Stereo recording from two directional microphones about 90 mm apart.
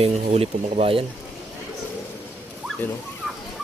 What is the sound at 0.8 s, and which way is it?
Speech, 90° right.